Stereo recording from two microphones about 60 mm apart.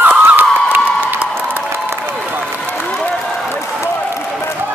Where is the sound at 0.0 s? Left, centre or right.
Right.